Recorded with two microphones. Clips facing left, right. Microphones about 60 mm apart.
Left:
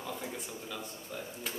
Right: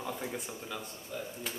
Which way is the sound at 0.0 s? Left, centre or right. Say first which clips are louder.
Right 2 dB; centre.